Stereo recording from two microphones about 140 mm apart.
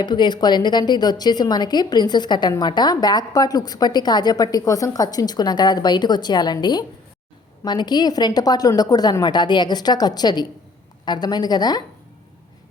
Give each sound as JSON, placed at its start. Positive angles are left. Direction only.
{"t": 0.0, "sound": "a woman's voice", "side_deg": 30}